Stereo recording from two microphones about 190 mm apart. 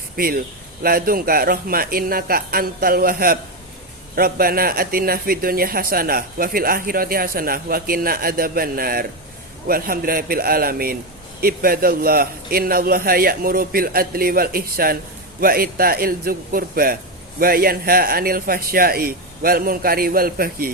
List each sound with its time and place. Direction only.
0.2 s speech: 50° right (ahead or behind)